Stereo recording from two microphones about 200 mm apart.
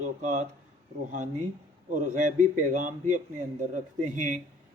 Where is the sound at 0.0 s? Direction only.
35° right (ahead or behind).